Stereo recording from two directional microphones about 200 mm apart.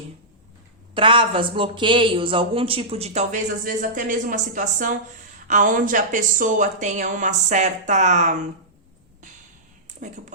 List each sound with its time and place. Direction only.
0.9 s a woman's voice: 25° right (ahead or behind)